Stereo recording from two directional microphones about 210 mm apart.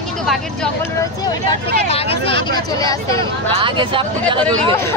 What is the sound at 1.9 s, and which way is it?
Speech, 30° left (ahead or behind).